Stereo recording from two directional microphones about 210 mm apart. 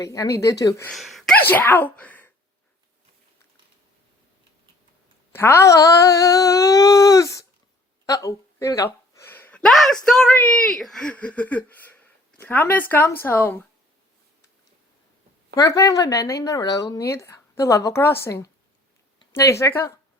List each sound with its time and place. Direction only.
0.0 s speech: 15° left (ahead or behind)
0.9 s speech: centre (ahead or behind)
5.3 s speech: 10° left (ahead or behind)
15.5 s speech: 15° left (ahead or behind)